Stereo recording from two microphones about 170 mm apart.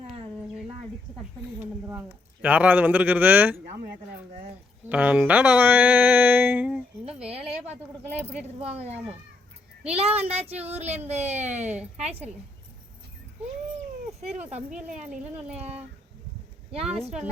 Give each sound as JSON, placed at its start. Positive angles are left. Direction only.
{"t": 1.5, "sound": "a man's voice", "side_deg": -15}
{"t": 4.9, "sound": "speech", "side_deg": -10}
{"t": 8.5, "sound": "speech", "side_deg": -35}
{"t": 11.7, "sound": "speech", "side_deg": -5}
{"t": 14.7, "sound": "speech", "side_deg": -5}
{"t": 16.8, "sound": "speech", "side_deg": -5}